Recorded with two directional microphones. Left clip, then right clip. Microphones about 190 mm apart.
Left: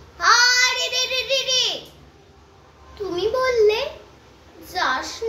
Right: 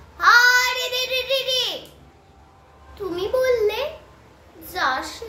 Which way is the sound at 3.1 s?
20° right (ahead or behind).